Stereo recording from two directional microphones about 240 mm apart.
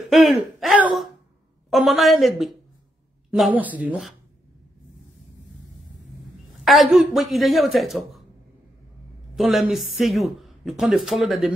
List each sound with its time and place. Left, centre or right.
0.1 s speech: centre
6.5 s speech: centre
9.3 s speech: centre